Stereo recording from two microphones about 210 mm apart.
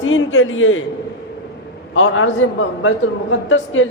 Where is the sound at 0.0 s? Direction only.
75° left (ahead or behind).